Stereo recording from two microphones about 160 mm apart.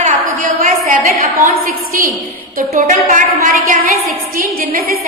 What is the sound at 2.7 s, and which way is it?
A woman's voice, 50° right (ahead or behind).